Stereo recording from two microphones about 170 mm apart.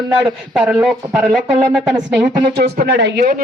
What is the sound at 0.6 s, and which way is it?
Speech, 5° right (ahead or behind).